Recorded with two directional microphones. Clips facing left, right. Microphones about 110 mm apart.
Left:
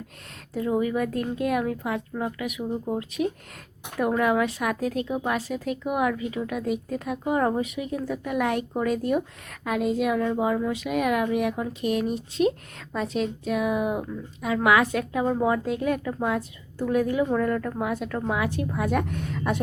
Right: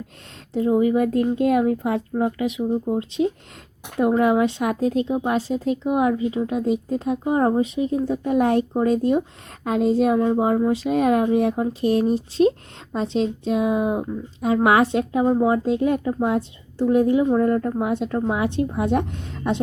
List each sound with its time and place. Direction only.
0.5 s a child's voice: 25° right (ahead or behind)